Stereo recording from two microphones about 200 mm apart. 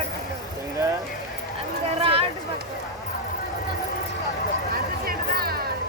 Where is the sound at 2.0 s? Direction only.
25° right (ahead or behind).